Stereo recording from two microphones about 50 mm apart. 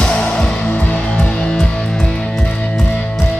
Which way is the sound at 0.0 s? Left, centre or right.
Centre.